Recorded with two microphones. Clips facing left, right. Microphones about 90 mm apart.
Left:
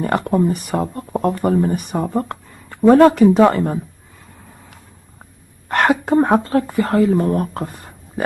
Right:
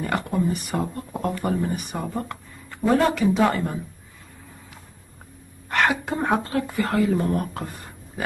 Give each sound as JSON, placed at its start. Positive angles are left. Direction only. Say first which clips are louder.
{"t": 0.0, "sound": "a woman's voice", "louder": "left 7 dB", "side_deg": 40}
{"t": 5.7, "sound": "a woman's voice", "louder": "left 7 dB", "side_deg": 45}